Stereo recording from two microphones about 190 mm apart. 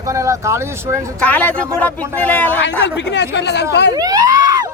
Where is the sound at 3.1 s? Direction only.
65° left (ahead or behind).